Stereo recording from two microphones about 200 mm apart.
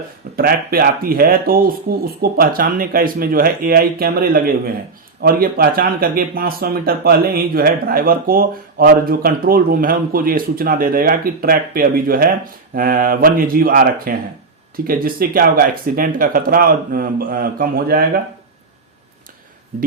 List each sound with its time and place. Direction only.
0.3 s speech: 50° right (ahead or behind)
19.7 s speech: 45° right (ahead or behind)